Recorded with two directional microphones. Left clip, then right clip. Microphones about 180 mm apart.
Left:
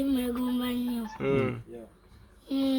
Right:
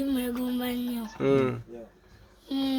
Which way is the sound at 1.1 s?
65° right (ahead or behind).